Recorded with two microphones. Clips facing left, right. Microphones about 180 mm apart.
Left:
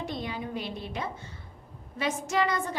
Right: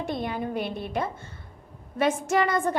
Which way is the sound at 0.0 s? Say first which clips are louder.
Right 5 dB; 55° right (ahead or behind).